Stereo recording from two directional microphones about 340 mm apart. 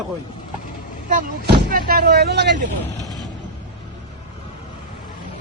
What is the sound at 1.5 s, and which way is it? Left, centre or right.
A man's voice, right.